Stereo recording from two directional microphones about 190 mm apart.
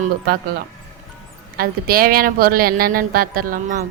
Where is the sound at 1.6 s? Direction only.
50° right (ahead or behind).